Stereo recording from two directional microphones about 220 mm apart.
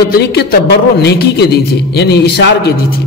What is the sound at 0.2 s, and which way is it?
A man's voice, 45° left (ahead or behind).